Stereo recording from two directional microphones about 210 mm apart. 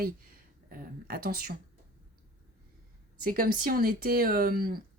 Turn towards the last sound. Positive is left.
turn(degrees=-45)  # may be behind; listen again after turning